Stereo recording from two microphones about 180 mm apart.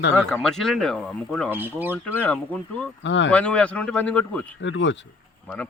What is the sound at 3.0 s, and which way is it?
Speech, 90° left.